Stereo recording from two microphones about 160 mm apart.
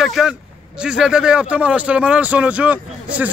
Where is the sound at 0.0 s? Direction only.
Centre (ahead or behind).